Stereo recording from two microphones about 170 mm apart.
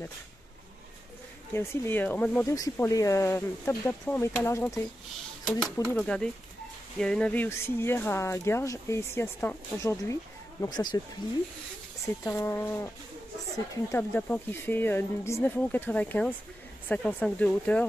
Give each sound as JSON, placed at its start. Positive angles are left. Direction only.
{"t": 1.5, "sound": "speech", "side_deg": 15}
{"t": 2.5, "sound": "speech", "side_deg": 20}
{"t": 5.6, "sound": "speech", "side_deg": 5}
{"t": 12.3, "sound": "speech", "side_deg": 15}
{"t": 13.9, "sound": "speech", "side_deg": 15}